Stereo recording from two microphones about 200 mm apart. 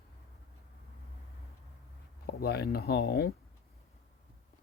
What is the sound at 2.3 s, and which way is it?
Speech, 50° left (ahead or behind).